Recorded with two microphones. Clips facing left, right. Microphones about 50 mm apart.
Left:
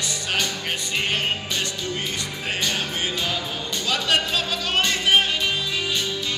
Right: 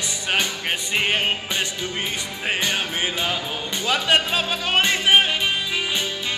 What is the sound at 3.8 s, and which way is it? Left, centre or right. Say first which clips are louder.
Music: right 3 dB; right.